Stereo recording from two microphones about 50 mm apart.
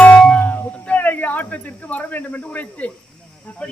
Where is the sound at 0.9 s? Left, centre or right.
Left.